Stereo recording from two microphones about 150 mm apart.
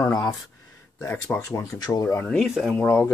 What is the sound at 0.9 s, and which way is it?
Speech, 20° left (ahead or behind).